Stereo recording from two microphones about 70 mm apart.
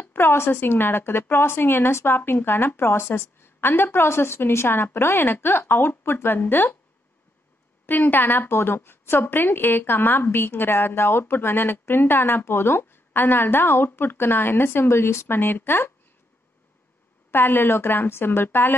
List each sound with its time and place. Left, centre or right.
0.0 s a woman's voice: left
7.8 s a woman's voice: left
17.3 s a woman's voice: left